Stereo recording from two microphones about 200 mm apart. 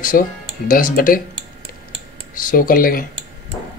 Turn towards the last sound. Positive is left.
turn(degrees=45)  # may be behind; listen again after turning